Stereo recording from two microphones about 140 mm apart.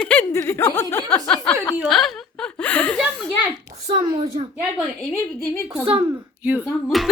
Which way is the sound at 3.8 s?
45° right (ahead or behind).